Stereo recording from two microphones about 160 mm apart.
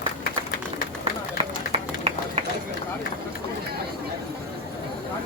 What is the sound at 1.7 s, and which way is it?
Run, 35° right (ahead or behind).